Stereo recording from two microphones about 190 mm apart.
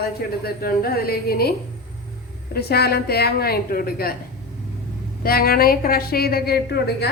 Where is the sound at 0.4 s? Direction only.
50° left (ahead or behind).